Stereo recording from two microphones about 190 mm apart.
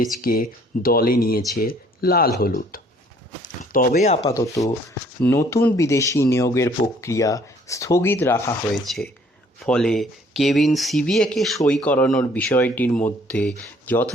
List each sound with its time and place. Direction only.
0.2 s speech: 50° left (ahead or behind)
5.2 s speech: 15° left (ahead or behind)
8.7 s speech: centre (ahead or behind)